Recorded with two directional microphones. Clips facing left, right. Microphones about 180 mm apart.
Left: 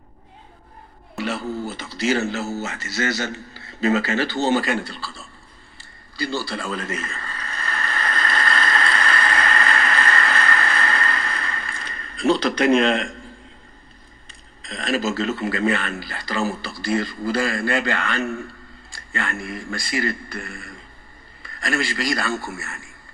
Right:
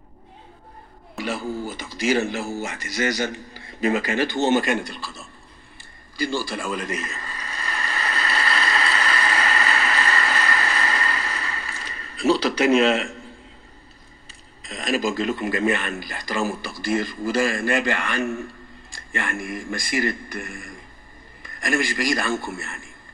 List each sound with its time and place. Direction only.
1.2 s speech: 10° right (ahead or behind)
5.8 s a sound: 15° right (ahead or behind)
14.6 s a man's voice: 10° right (ahead or behind)